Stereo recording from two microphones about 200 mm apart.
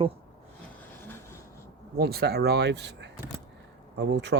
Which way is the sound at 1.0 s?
10° left (ahead or behind).